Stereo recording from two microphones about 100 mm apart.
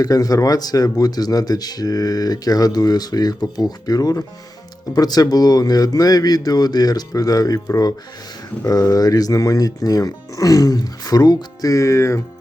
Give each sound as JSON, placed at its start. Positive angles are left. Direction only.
{"t": 0.0, "sound": "speech", "side_deg": 35}